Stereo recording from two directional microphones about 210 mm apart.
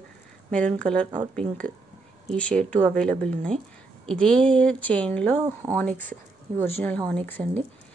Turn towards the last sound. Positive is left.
turn(degrees=5)  # may be behind; listen again after turning